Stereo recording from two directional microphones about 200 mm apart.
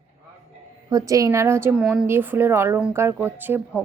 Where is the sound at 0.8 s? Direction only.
15° right (ahead or behind).